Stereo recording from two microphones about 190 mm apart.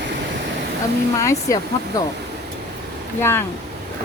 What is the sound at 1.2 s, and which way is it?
Speech, 15° left (ahead or behind).